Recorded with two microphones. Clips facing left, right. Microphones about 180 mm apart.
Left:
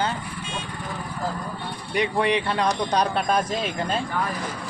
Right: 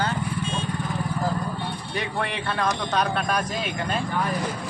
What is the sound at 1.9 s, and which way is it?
Speech, 20° left (ahead or behind).